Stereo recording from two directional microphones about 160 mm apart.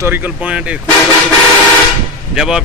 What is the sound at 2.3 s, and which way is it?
Speech, 5° right (ahead or behind).